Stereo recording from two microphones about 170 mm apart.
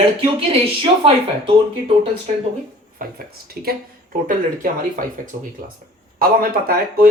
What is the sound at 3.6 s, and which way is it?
Speech, 60° right (ahead or behind).